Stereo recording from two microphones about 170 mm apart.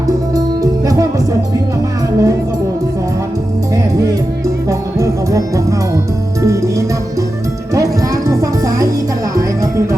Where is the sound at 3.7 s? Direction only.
20° right (ahead or behind).